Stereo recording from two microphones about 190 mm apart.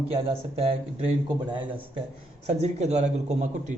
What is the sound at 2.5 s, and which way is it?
A man's voice, 35° right (ahead or behind).